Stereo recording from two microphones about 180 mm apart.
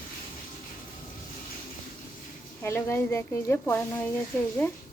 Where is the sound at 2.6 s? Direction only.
15° left (ahead or behind).